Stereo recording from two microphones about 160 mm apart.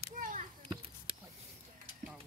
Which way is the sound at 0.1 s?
55° right (ahead or behind).